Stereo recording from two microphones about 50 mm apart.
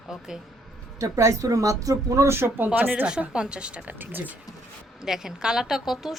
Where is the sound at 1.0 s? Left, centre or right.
Right.